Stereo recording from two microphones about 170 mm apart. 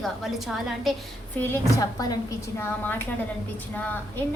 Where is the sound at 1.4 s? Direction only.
15° left (ahead or behind).